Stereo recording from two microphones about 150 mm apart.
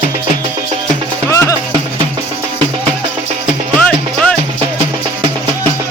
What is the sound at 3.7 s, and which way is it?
Music, 10° left (ahead or behind).